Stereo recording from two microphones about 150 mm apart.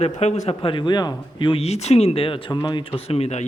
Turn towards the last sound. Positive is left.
turn(degrees=45)  # may be behind; listen again after turning